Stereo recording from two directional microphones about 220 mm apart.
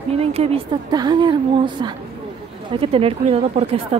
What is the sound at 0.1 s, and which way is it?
Speech, 25° right (ahead or behind).